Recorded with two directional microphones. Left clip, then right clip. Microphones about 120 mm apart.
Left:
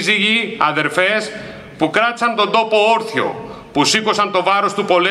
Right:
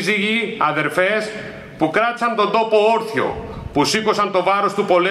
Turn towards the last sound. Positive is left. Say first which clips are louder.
# left 1 dB
turn(degrees=25)  # may be behind; listen again after turning